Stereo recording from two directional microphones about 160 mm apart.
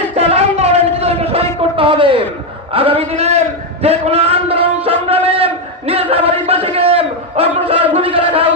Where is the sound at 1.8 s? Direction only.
30° right (ahead or behind).